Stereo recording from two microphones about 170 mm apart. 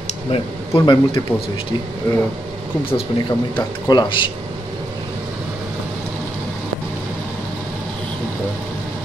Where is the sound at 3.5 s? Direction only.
25° left (ahead or behind).